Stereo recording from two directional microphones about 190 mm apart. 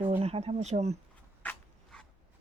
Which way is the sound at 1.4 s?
5° left (ahead or behind).